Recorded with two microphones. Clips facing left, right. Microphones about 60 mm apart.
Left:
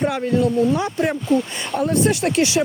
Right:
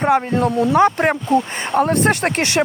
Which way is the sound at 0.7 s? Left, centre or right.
Right.